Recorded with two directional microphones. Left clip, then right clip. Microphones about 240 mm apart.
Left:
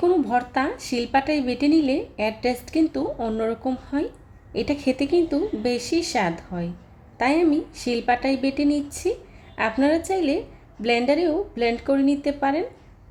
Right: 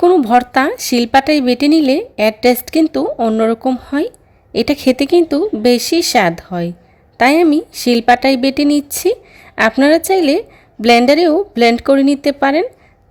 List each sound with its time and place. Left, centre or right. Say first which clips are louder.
0.0 s a woman's voice: right 11 dB; right